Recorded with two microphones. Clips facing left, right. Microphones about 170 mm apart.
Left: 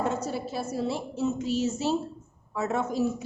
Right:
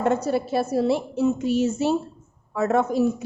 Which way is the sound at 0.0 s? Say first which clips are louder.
Right 7 dB; 65° right (ahead or behind).